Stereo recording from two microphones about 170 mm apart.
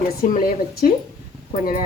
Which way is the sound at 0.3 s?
55° left (ahead or behind).